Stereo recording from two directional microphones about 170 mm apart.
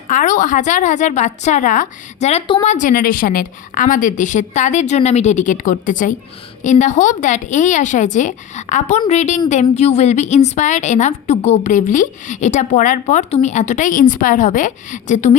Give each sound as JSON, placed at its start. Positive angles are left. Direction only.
{"t": 0.1, "sound": "a woman's voice", "side_deg": 50}